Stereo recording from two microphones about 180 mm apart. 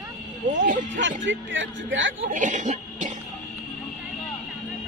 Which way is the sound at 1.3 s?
90° right.